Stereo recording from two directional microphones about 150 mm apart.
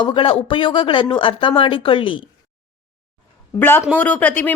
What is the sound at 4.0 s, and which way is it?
Speech, 10° left (ahead or behind).